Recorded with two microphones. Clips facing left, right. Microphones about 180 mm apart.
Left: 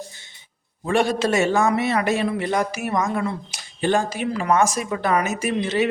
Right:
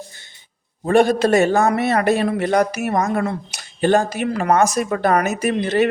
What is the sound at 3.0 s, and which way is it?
Speech, 45° right (ahead or behind).